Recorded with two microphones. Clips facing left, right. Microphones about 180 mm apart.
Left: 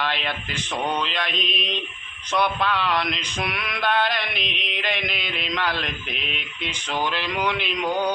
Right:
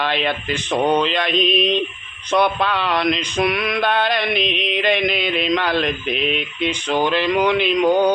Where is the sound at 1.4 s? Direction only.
90° right.